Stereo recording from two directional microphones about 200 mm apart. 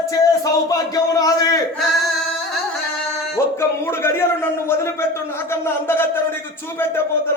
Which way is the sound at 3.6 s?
10° left (ahead or behind).